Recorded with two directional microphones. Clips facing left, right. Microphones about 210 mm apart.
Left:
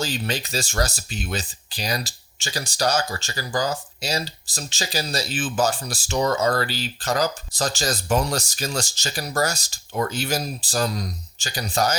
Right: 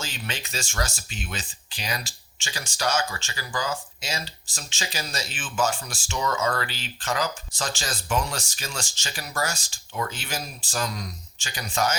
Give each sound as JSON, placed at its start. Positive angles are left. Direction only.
{"t": 0.0, "sound": "speech", "side_deg": 35}